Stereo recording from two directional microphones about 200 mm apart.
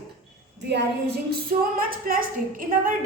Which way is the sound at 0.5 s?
60° right (ahead or behind).